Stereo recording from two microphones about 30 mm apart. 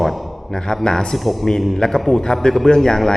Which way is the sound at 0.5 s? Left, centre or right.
Centre.